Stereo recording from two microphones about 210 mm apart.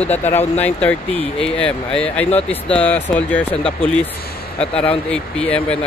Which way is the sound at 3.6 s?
25° left (ahead or behind).